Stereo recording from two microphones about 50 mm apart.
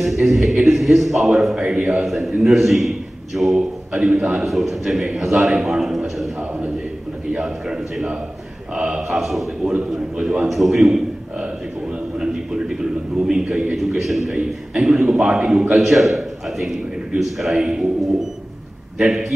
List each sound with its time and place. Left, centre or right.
0.0 s a man's voice: centre
7.3 s a man's voice: centre
9.9 s a man's voice: centre
12.2 s a sound: centre
13.7 s a man's voice: centre
14.3 s a man's voice: centre
18.9 s a man's voice: centre